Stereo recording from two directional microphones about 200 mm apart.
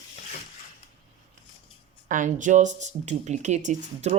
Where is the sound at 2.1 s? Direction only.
40° right (ahead or behind).